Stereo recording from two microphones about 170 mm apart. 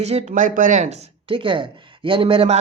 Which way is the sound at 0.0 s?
40° right (ahead or behind).